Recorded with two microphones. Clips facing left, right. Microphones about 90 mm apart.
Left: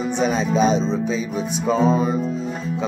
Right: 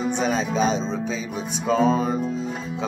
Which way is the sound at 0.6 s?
35° right (ahead or behind).